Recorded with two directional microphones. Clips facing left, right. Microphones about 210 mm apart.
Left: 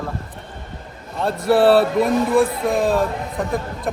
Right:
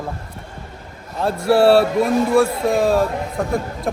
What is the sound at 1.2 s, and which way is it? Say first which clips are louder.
Speech: right 1 dB; centre (ahead or behind).